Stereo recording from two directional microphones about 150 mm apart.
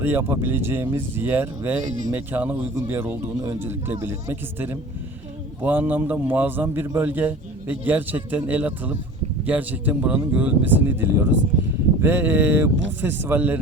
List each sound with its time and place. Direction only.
0.0 s a man's voice: 15° right (ahead or behind)
1.8 s speech: 55° right (ahead or behind)
2.1 s a man's voice: 10° right (ahead or behind)